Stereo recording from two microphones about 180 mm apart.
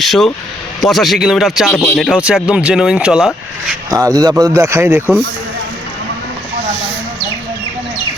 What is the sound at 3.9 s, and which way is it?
A man's voice, 20° right (ahead or behind).